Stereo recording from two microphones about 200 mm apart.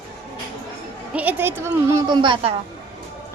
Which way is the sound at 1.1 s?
10° right (ahead or behind).